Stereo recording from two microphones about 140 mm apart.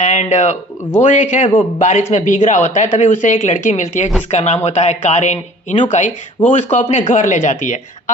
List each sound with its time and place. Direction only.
0.0 s speech: 55° left (ahead or behind)
1.5 s a man's voice: 45° left (ahead or behind)
7.1 s speech: 60° left (ahead or behind)